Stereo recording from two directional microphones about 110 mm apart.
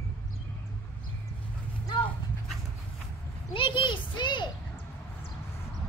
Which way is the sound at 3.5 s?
50° left (ahead or behind).